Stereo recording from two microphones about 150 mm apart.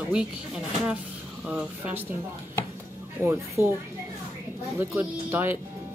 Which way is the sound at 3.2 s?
15° right (ahead or behind).